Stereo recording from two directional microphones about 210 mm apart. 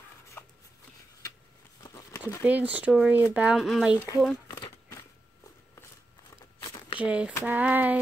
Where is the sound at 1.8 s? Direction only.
15° left (ahead or behind).